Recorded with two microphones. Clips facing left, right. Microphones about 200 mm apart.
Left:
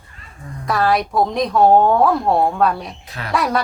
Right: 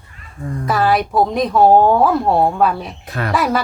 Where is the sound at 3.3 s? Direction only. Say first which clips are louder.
Right 1 dB; centre (ahead or behind).